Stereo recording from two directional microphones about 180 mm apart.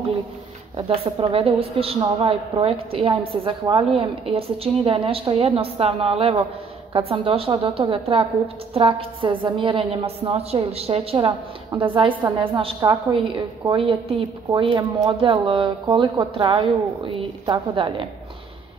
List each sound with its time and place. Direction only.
0.7 s a woman's voice: 30° right (ahead or behind)